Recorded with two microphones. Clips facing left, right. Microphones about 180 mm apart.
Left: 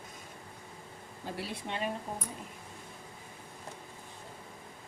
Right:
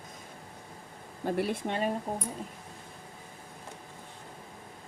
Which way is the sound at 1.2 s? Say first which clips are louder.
Right 9 dB; 55° right (ahead or behind).